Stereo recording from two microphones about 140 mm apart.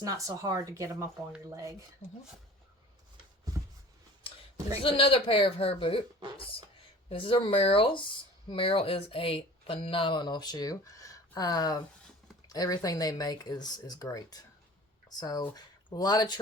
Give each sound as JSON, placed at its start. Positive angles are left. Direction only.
{"t": 0.0, "sound": "speech", "side_deg": -25}
{"t": 4.8, "sound": "speech", "side_deg": 40}